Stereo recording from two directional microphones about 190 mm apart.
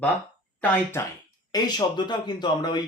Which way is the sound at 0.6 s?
10° left (ahead or behind).